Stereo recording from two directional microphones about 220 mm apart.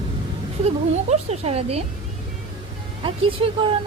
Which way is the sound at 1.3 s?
30° right (ahead or behind).